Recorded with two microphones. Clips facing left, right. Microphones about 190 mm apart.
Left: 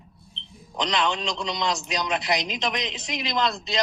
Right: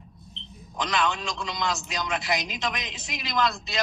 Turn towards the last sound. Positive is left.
turn(degrees=20)  # may be behind; listen again after turning